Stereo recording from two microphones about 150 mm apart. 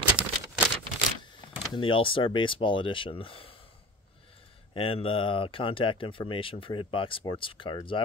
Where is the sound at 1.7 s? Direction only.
35° left (ahead or behind).